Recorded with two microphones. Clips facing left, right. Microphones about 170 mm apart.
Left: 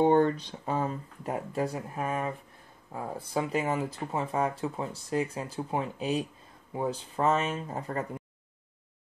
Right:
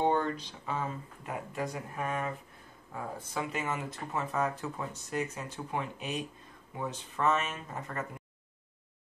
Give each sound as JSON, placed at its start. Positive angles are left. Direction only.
{"t": 0.1, "sound": "speech", "side_deg": 45}